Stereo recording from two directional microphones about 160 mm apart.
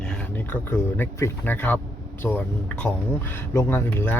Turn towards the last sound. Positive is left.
turn(degrees=15)  # may be behind; listen again after turning